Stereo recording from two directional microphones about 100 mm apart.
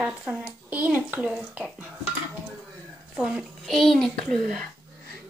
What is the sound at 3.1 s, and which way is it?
A child's voice, 10° right (ahead or behind).